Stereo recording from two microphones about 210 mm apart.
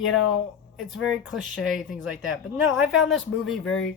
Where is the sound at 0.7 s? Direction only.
Centre (ahead or behind).